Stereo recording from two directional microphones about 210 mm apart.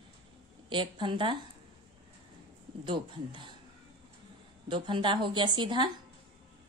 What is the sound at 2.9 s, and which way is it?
Speech, 20° right (ahead or behind).